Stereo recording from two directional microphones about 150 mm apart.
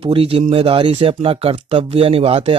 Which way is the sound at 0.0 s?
40° right (ahead or behind).